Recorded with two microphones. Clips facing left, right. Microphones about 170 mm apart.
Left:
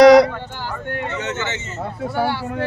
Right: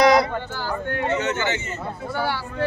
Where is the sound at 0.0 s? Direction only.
80° left.